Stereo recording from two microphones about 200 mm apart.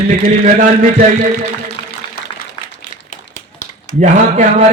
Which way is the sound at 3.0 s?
35° left (ahead or behind).